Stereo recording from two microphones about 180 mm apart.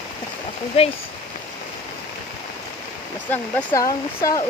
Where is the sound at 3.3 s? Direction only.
10° left (ahead or behind).